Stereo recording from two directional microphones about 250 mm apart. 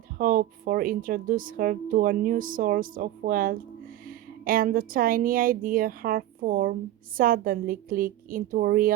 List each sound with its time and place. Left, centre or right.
0.2 s a woman's voice: right